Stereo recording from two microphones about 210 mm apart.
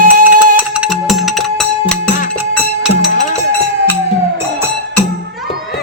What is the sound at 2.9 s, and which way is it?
Music, 35° left (ahead or behind).